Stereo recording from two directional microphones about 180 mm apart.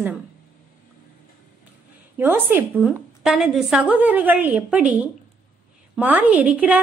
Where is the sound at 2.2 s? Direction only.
10° right (ahead or behind).